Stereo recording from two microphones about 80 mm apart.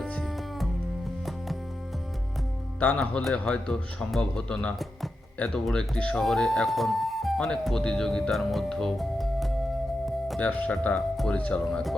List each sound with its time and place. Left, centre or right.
0.0 s music: centre
2.8 s speech: centre
7.3 s speech: centre
10.4 s speech: centre